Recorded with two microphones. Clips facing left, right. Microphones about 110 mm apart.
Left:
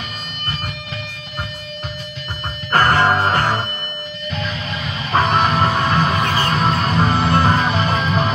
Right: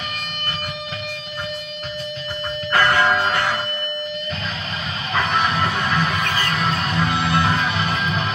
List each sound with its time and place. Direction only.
2.7 s music: 40° left (ahead or behind)
5.3 s music: 45° left (ahead or behind)
6.2 s music: 30° left (ahead or behind)
6.5 s music: 40° left (ahead or behind)